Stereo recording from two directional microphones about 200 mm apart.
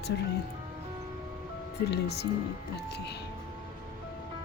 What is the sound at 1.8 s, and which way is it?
Speech, 55° left (ahead or behind).